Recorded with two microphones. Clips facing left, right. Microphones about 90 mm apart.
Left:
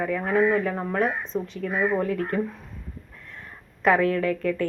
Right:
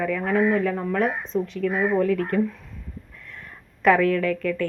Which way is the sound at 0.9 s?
Centre (ahead or behind).